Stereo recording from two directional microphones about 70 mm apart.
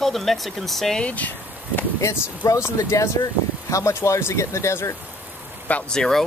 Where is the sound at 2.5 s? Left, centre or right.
Left.